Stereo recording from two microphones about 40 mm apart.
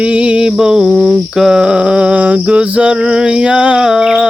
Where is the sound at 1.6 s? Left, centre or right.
Right.